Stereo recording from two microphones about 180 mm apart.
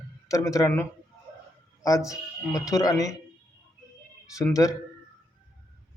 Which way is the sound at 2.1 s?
15° left (ahead or behind).